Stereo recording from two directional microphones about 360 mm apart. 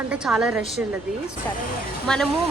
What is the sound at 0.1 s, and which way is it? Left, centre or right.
Speech, centre.